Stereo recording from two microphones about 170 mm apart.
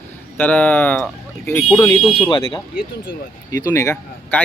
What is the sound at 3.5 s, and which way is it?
Speech, 20° left (ahead or behind).